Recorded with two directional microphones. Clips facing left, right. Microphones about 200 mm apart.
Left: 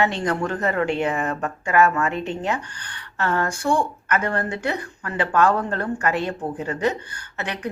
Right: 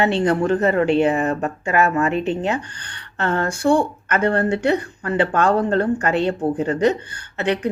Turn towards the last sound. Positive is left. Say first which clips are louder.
# right 8 dB
turn(degrees=-25)  # may be behind; listen again after turning